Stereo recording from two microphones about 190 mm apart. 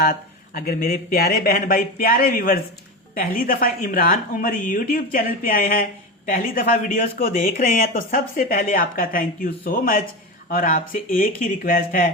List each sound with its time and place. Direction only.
0.0 s speech: 50° left (ahead or behind)